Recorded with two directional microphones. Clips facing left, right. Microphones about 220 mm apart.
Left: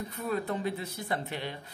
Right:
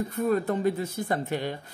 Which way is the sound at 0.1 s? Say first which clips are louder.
Right 6 dB; 45° right (ahead or behind).